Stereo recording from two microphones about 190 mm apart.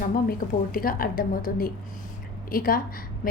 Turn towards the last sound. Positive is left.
turn(degrees=45)  # may be behind; listen again after turning